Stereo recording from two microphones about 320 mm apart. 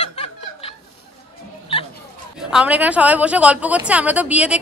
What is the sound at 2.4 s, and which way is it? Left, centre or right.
Speech, centre.